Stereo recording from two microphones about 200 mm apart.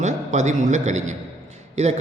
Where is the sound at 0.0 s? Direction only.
35° right (ahead or behind).